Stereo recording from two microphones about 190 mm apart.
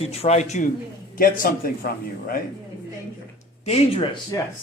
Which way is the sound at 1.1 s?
50° left (ahead or behind).